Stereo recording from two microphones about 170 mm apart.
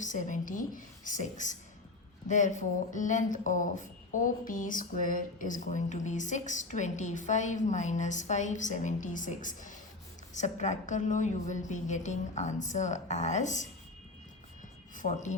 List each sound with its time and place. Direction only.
0.0 s speech: 45° left (ahead or behind)
14.9 s speech: 45° left (ahead or behind)